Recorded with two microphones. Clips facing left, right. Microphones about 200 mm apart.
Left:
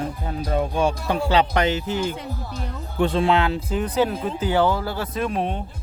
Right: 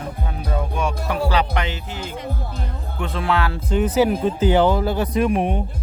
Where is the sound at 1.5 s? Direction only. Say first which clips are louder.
Left 5 dB; 45° left (ahead or behind).